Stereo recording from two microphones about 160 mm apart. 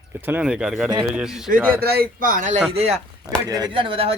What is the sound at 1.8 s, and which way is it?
Speech, 75° right (ahead or behind).